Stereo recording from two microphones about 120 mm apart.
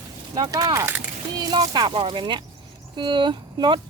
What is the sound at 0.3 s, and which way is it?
Speech, 30° right (ahead or behind).